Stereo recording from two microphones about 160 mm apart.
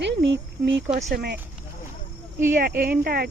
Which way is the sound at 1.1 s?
75° right (ahead or behind).